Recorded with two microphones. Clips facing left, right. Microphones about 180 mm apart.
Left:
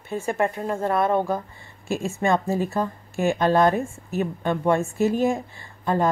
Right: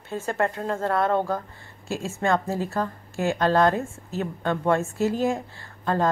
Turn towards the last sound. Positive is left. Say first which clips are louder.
# left 1 dB
turn(degrees=15)  # may be behind; listen again after turning